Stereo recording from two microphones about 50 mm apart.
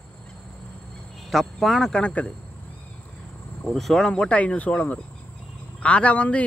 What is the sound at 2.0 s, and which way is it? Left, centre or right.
Speech, left.